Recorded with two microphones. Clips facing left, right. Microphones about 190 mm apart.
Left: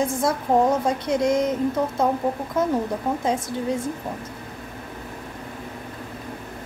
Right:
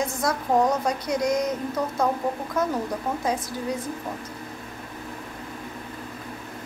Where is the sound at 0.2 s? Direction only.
25° left (ahead or behind).